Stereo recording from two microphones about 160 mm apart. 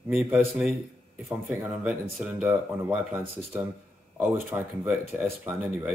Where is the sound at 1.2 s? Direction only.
10° right (ahead or behind).